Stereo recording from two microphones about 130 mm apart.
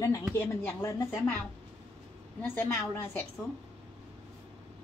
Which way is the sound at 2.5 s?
20° left (ahead or behind).